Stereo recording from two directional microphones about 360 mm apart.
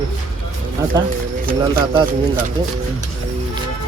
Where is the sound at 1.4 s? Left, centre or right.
Right.